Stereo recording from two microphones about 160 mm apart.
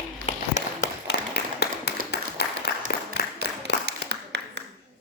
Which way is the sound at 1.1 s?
90° left.